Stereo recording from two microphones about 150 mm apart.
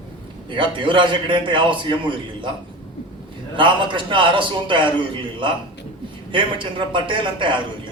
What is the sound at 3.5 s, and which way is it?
A man's voice, 35° right (ahead or behind).